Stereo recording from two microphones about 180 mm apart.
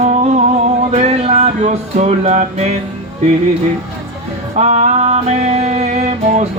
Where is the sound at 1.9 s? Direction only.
40° right (ahead or behind).